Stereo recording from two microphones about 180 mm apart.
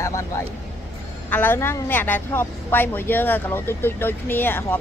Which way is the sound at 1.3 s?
10° left (ahead or behind).